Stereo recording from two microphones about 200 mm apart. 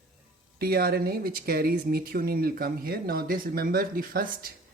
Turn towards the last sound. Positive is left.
turn(degrees=-45)  # may be behind; listen again after turning